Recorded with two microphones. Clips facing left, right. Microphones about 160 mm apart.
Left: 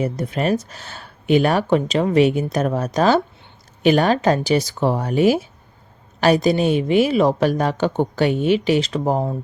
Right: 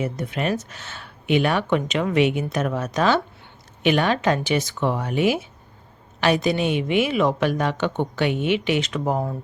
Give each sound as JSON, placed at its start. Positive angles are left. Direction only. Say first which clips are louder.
{"t": 0.0, "sound": "a woman's voice", "louder": "left 4 dB", "side_deg": 35}